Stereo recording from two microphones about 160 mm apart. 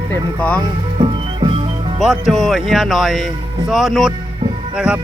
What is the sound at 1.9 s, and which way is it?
Speech, centre (ahead or behind).